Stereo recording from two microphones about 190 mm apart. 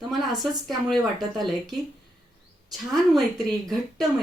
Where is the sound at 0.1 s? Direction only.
Centre (ahead or behind).